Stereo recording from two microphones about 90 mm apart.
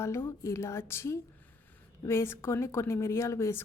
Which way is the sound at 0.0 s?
30° left (ahead or behind).